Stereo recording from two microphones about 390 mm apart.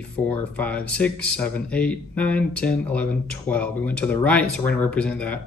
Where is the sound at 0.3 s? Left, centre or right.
Centre.